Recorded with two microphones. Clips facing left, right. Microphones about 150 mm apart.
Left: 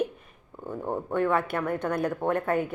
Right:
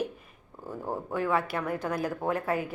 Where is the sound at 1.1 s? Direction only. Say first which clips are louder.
Left 3 dB; 5° right (ahead or behind).